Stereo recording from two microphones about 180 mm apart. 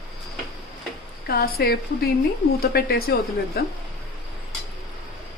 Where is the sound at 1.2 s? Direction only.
60° left (ahead or behind).